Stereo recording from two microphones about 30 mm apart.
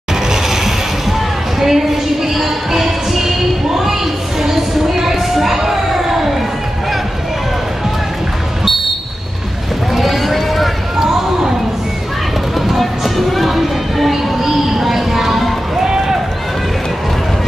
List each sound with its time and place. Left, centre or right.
0.3 s a sound: centre
1.6 s music: centre
5.0 s crowd: centre
9.9 s run: centre
12.6 s music: centre
14.4 s a sound: centre
15.8 s run: centre